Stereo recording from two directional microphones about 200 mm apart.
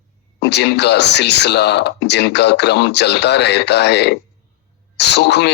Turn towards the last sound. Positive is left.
turn(degrees=55)  # may be behind; listen again after turning